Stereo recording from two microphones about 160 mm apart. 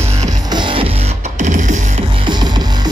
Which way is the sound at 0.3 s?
25° right (ahead or behind).